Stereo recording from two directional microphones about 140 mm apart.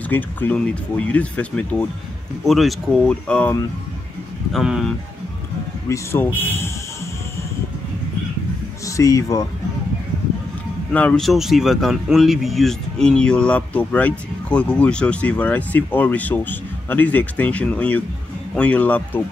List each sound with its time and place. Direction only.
0.1 s speech: 10° left (ahead or behind)
5.9 s speech: 15° left (ahead or behind)
8.8 s speech: 25° left (ahead or behind)
10.9 s speech: 10° left (ahead or behind)